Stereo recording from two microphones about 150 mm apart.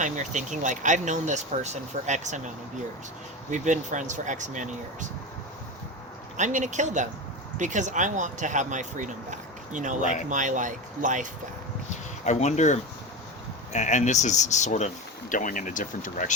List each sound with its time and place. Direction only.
0.0 s speech: 55° right (ahead or behind)
3.5 s speech: 55° right (ahead or behind)
6.3 s speech: 55° right (ahead or behind)
12.2 s speech: 50° left (ahead or behind)